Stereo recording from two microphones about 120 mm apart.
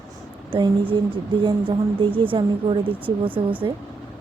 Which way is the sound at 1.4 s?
45° right (ahead or behind).